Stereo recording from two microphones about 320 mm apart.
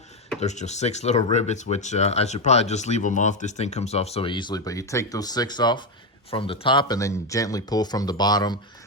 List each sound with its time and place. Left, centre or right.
0.3 s speech: left